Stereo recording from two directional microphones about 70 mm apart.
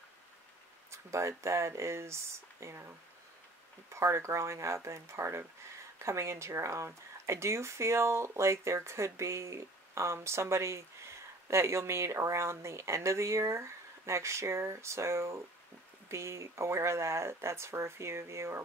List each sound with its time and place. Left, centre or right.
0.9 s speech: right
3.9 s speech: right